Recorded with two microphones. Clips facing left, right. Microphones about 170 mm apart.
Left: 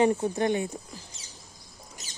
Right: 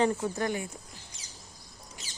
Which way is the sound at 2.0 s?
45° left (ahead or behind).